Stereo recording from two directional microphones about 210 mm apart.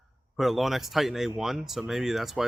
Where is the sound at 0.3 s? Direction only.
Centre (ahead or behind).